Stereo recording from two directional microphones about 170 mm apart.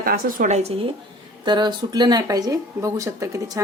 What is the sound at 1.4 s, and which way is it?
A woman's voice, 25° right (ahead or behind).